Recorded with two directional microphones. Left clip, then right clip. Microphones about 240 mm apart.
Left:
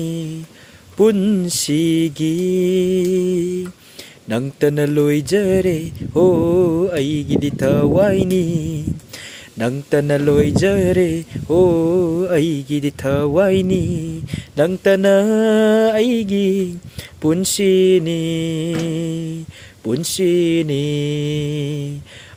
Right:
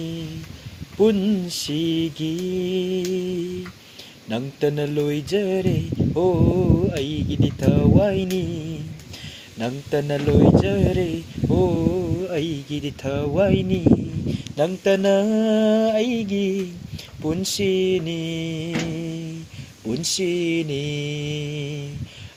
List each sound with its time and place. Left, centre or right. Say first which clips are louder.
1.0 s speech: left 4 dB; left